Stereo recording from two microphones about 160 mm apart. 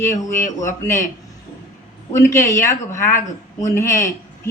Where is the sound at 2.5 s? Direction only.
20° left (ahead or behind).